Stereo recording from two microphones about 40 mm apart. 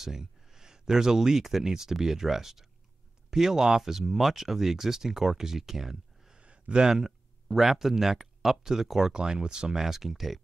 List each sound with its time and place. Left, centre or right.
0.0 s speech: centre
6.3 s a sound: right
6.9 s speech: centre
9.1 s speech: right
9.8 s speech: centre